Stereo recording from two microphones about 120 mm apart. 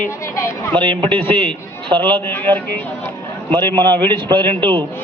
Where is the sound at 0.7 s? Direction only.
45° right (ahead or behind).